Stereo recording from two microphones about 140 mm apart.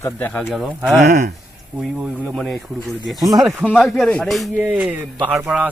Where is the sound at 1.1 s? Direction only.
90° right.